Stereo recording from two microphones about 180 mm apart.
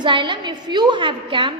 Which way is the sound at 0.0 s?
25° right (ahead or behind).